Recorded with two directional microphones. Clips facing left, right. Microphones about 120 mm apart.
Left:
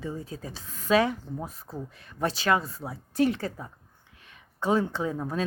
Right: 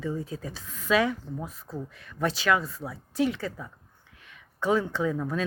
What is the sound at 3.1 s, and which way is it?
Speech, 45° left (ahead or behind).